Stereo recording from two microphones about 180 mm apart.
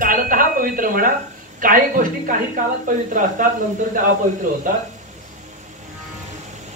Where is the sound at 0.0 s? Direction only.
50° right (ahead or behind).